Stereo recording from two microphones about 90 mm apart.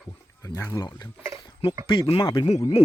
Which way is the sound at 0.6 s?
30° left (ahead or behind).